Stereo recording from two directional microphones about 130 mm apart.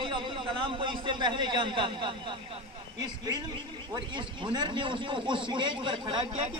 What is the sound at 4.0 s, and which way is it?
A man's voice, 40° right (ahead or behind).